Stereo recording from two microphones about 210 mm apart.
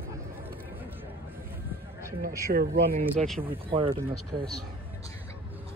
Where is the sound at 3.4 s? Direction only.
25° right (ahead or behind).